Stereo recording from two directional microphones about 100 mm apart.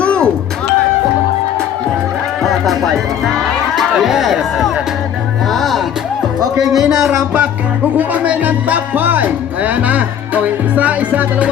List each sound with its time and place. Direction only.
0.0 s music: 10° left (ahead or behind)
2.4 s music: centre (ahead or behind)
6.6 s speech: 5° right (ahead or behind)
7.9 s speech: 15° right (ahead or behind)